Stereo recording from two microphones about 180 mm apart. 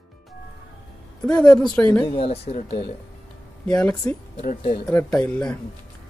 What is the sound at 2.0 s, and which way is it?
Speech, 30° left (ahead or behind).